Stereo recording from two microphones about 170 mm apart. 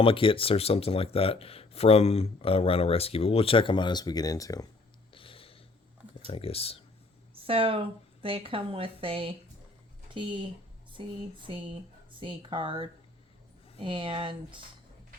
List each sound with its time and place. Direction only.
0.0 s speech: 30° left (ahead or behind)
5.1 s a sound: 30° left (ahead or behind)
6.3 s speech: 35° left (ahead or behind)
7.4 s a woman's voice: 35° right (ahead or behind)
10.9 s a woman's voice: 30° right (ahead or behind)